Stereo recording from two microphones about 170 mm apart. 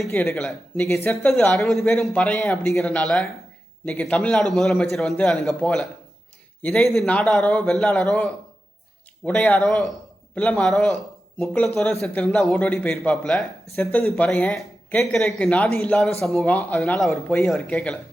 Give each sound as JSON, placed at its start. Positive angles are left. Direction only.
{"t": 0.1, "sound": "speech", "side_deg": 15}
{"t": 0.9, "sound": "speech", "side_deg": 15}
{"t": 1.5, "sound": "speech", "side_deg": 0}
{"t": 9.2, "sound": "speech", "side_deg": 10}